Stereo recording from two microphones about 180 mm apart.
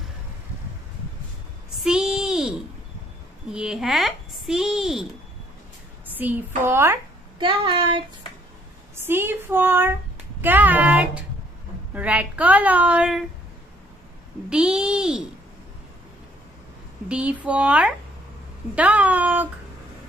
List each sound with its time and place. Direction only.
1.8 s a sound: 5° right (ahead or behind)
3.4 s a woman's voice: 5° right (ahead or behind)
6.1 s a woman's voice: 10° right (ahead or behind)
7.3 s a sound: 25° right (ahead or behind)
9.0 s a woman's voice: 10° right (ahead or behind)
14.5 s speech: 5° right (ahead or behind)
17.1 s a woman's voice: 5° right (ahead or behind)